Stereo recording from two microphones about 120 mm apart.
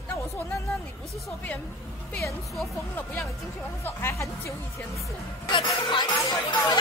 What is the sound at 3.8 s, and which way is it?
Speech, 20° left (ahead or behind).